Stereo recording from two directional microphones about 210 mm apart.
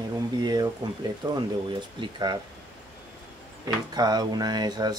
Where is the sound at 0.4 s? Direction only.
20° right (ahead or behind).